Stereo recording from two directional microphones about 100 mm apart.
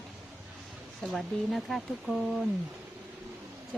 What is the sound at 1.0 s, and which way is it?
Speech, centre (ahead or behind).